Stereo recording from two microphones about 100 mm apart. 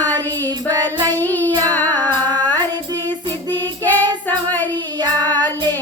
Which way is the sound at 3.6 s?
20° left (ahead or behind).